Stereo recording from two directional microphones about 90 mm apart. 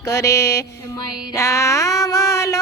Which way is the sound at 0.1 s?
35° left (ahead or behind).